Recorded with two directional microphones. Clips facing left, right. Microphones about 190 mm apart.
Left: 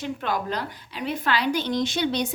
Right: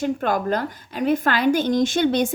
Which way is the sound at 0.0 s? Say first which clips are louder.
Right 6 dB; 45° right (ahead or behind).